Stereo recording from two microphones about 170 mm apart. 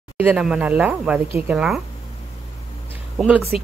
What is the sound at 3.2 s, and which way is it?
Speech, 10° right (ahead or behind).